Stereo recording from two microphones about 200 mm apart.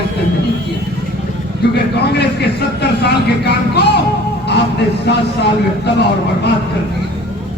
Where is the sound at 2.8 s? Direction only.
55° left (ahead or behind).